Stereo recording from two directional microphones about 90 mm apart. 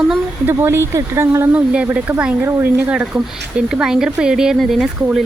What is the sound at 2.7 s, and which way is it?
Speech, 15° right (ahead or behind).